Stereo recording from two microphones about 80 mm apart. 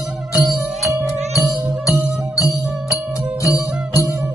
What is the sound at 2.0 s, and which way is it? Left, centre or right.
Music, left.